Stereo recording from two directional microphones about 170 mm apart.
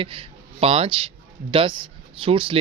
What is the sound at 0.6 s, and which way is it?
A man's voice, 35° right (ahead or behind).